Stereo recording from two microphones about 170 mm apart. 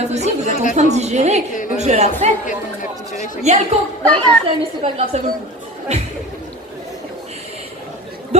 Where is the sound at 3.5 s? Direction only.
40° right (ahead or behind).